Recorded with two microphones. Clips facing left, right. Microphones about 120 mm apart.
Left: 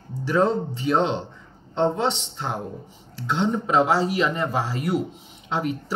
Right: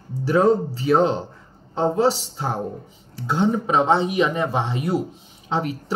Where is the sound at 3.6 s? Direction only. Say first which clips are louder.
Right 1 dB; 25° right (ahead or behind).